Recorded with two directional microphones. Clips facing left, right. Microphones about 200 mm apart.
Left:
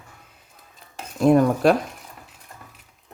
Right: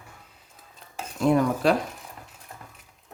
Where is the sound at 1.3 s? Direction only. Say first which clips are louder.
Left 5 dB; 50° left (ahead or behind).